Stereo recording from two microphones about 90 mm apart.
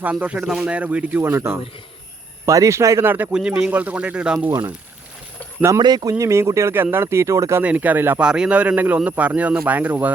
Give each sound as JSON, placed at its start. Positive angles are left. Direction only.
{"t": 0.0, "sound": "speech", "side_deg": -20}
{"t": 1.2, "sound": "speech", "side_deg": -30}
{"t": 3.3, "sound": "speech", "side_deg": -10}
{"t": 5.8, "sound": "speech", "side_deg": -50}
{"t": 6.1, "sound": "speech", "side_deg": -35}
{"t": 7.6, "sound": "speech", "side_deg": -15}
{"t": 8.2, "sound": "speech", "side_deg": -10}